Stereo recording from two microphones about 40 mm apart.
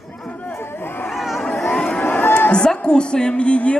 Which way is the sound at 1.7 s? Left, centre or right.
Left.